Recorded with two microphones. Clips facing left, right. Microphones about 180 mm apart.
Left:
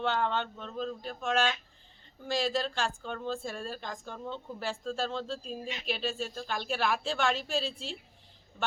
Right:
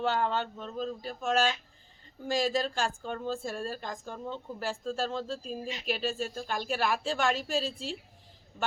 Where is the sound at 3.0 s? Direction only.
10° right (ahead or behind).